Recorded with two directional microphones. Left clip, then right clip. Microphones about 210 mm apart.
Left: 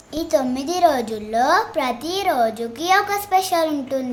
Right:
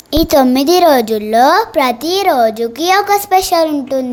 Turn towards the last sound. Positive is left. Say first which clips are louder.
# right 7 dB
turn(degrees=-30)  # may be behind; listen again after turning